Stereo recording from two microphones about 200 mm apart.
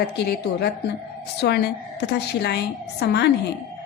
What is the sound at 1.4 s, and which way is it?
A woman's voice, 55° left (ahead or behind).